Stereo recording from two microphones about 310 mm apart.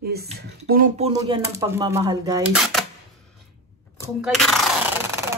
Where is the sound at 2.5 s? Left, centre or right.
Centre.